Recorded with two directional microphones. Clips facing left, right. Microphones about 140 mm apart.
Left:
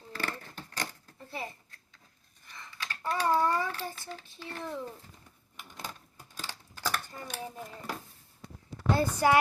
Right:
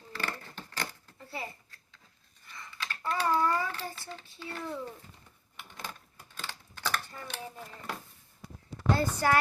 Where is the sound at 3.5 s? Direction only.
10° left (ahead or behind).